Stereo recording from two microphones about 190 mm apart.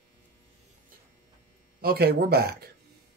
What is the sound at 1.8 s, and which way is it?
Speech, 55° right (ahead or behind).